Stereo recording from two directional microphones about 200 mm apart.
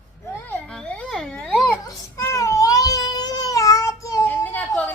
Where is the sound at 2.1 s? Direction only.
15° left (ahead or behind).